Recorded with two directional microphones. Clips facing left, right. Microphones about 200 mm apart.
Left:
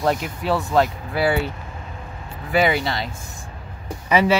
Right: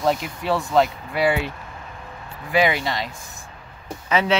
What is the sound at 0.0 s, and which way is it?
Speech, centre (ahead or behind).